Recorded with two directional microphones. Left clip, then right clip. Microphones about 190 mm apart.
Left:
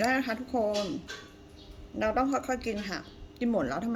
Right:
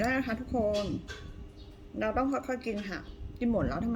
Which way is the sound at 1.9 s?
10° right (ahead or behind).